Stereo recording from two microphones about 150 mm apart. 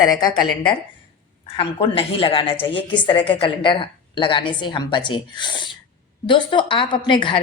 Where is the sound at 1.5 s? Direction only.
40° left (ahead or behind).